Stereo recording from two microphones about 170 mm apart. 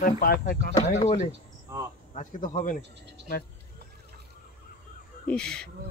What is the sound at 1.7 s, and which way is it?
Speech, 15° right (ahead or behind).